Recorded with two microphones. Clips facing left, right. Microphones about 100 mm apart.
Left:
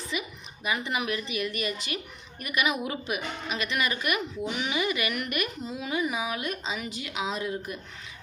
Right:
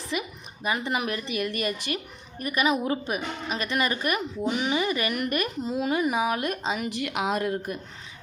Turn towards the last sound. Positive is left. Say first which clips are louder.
# right 5 dB
turn(degrees=-45)  # may be behind; listen again after turning